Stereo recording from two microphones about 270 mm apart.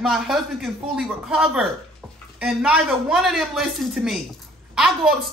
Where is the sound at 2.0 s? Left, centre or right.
Centre.